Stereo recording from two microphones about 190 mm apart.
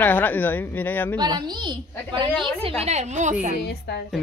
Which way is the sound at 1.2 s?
20° right (ahead or behind).